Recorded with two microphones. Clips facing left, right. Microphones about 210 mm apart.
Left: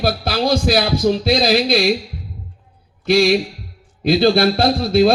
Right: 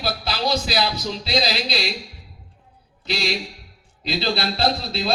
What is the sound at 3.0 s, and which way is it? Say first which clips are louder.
A man's voice: left 12 dB; 50° left (ahead or behind).